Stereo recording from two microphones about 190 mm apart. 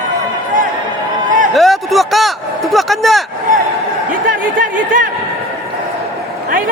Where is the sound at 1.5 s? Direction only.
Centre (ahead or behind).